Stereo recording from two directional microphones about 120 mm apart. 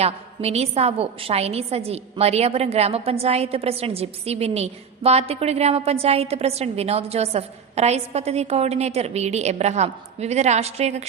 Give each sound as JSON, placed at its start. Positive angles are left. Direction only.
{"t": 0.0, "sound": "a woman's voice", "side_deg": -60}